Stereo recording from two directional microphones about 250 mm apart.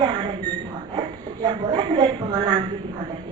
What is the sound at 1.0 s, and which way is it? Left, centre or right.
A woman's voice, centre.